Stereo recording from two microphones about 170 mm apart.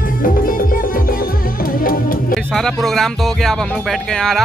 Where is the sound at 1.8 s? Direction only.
55° left (ahead or behind).